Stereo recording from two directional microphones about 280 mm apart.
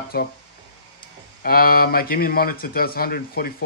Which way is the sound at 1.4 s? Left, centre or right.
Left.